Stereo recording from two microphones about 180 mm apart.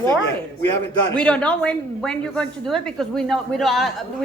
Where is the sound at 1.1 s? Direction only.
5° left (ahead or behind).